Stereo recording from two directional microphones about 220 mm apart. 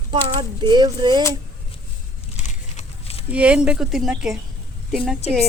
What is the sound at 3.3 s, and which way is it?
Speech, 5° right (ahead or behind).